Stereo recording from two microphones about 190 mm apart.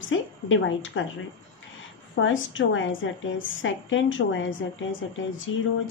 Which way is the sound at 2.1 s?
90° left.